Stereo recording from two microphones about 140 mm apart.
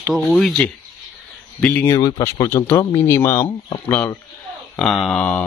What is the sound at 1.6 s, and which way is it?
Speech, 15° left (ahead or behind).